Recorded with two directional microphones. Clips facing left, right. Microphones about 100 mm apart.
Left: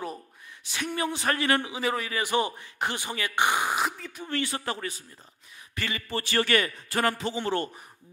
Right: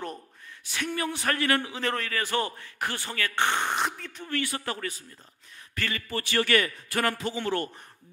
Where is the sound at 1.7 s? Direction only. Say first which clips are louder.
Left 1 dB; 10° left (ahead or behind).